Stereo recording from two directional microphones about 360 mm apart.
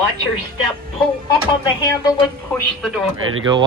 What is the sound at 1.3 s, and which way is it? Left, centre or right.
Speech, centre.